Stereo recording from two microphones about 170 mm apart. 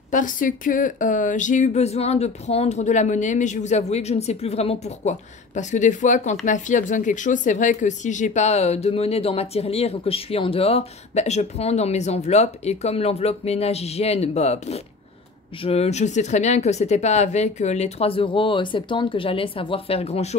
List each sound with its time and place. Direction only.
0.1 s speech: 50° left (ahead or behind)